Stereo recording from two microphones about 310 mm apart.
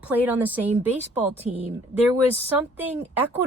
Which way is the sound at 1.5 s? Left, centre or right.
Right.